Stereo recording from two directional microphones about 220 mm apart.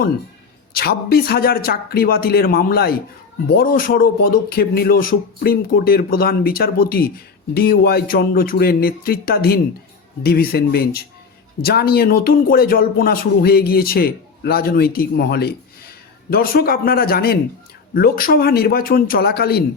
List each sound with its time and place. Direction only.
0.7 s speech: 45° left (ahead or behind)